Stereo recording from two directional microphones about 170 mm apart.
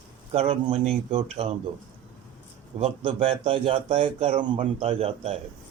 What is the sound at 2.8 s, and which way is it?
Speech, 35° right (ahead or behind).